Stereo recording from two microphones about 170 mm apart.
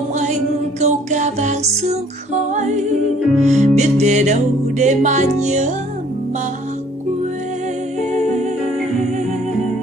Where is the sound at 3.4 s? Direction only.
40° right (ahead or behind).